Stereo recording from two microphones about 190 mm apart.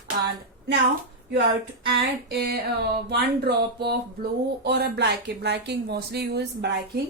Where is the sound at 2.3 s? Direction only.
60° right (ahead or behind).